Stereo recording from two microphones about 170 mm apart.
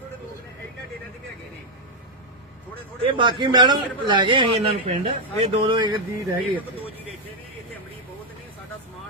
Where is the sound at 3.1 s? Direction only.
25° right (ahead or behind).